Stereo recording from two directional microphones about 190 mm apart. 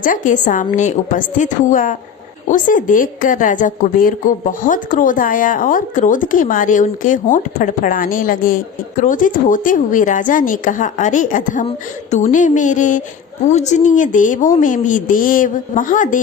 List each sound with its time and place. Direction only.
0.0 s a woman's voice: 45° left (ahead or behind)